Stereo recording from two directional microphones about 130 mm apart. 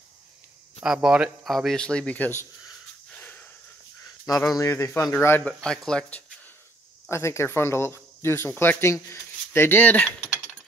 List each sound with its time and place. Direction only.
0.8 s speech: 5° right (ahead or behind); by 2.4 s 15° left (ahead or behind)
3.1 s wheeze: 10° left (ahead or behind)
4.5 s speech: 20° left (ahead or behind)
5.5 s speech: 5° left (ahead or behind)
7.1 s speech: 20° left (ahead or behind)